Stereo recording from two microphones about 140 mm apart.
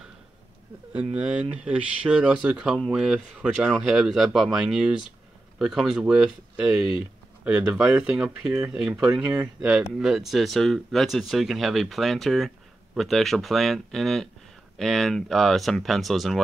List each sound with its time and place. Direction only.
0.9 s speech: 10° right (ahead or behind)